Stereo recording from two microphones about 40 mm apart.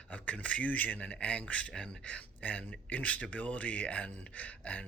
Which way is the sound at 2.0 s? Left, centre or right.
Left.